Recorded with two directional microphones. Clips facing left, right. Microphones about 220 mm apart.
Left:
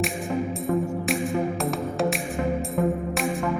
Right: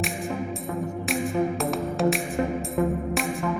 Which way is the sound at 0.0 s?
Centre (ahead or behind).